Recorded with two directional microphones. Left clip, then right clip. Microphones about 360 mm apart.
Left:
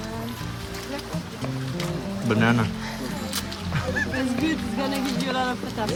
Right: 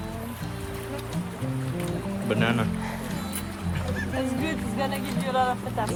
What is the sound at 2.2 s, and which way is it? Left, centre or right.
Speech, centre.